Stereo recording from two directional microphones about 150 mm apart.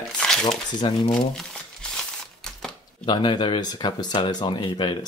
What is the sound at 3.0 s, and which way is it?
Speech, 30° left (ahead or behind).